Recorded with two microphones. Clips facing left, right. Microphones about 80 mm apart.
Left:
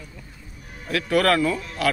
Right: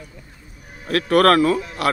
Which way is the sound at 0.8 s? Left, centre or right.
Right.